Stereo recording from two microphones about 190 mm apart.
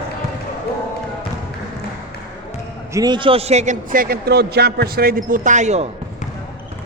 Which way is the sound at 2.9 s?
20° right (ahead or behind).